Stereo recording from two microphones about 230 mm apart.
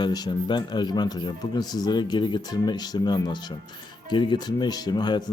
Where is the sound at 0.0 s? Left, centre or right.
Centre.